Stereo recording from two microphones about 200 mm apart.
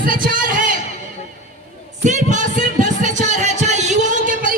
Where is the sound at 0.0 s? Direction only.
45° right (ahead or behind).